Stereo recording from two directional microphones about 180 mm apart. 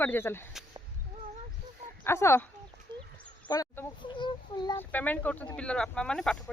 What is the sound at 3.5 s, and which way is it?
Speech, 20° left (ahead or behind).